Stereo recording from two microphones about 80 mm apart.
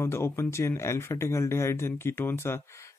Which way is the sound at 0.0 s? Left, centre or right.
Left.